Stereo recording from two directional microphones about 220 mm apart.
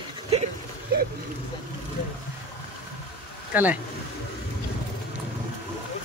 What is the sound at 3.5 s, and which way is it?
Speech, 10° right (ahead or behind).